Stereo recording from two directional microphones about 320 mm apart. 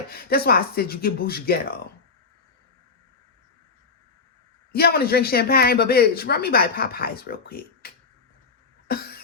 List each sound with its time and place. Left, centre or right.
0.1 s speech: left
4.7 s speech: left
8.9 s cough: left